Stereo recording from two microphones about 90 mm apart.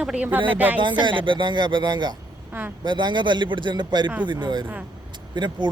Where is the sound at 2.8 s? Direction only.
60° right (ahead or behind).